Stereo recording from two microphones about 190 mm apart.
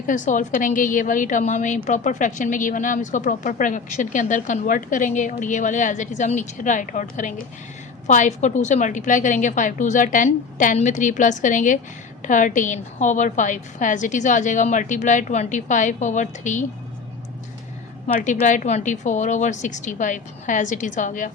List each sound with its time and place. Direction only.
0.1 s a woman's voice: 40° left (ahead or behind)
18.2 s a woman's voice: 40° left (ahead or behind)